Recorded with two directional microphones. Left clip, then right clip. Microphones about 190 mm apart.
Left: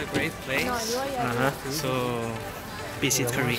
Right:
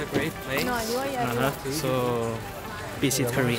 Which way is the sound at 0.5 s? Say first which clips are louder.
Even; 20° right (ahead or behind).